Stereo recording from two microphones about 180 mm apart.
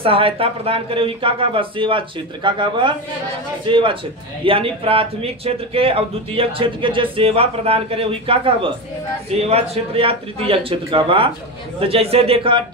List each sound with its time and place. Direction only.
0.0 s a man's voice: 30° right (ahead or behind)